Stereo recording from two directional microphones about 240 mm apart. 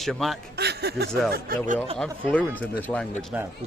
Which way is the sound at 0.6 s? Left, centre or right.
Right.